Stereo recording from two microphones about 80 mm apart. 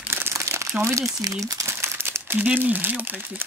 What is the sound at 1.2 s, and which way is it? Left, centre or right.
Speech, right.